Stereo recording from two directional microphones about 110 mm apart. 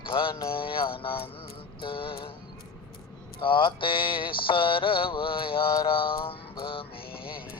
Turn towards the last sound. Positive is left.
turn(degrees=55)  # may be behind; listen again after turning